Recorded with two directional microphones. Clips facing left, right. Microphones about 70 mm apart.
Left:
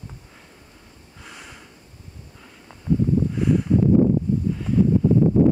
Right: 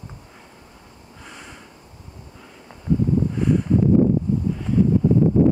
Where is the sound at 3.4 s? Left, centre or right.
Centre.